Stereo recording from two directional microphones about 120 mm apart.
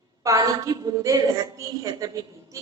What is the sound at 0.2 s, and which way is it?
A woman's voice, 30° right (ahead or behind).